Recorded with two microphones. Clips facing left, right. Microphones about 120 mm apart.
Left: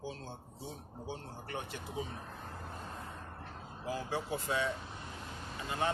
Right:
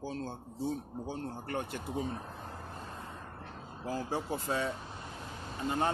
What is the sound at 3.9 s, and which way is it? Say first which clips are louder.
Speech: right 2 dB; 40° right (ahead or behind).